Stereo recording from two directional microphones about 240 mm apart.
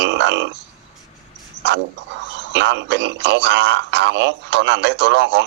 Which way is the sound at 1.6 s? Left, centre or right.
Right.